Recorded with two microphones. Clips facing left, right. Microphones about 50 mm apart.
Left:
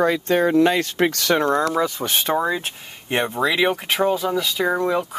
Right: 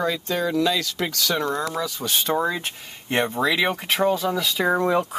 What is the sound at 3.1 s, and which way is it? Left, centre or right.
Speech, centre.